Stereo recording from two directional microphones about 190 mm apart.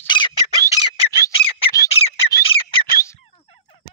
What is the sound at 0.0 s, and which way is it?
Bird, 25° left (ahead or behind).